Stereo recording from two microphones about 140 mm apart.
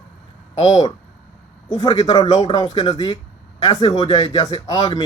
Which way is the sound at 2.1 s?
25° left (ahead or behind).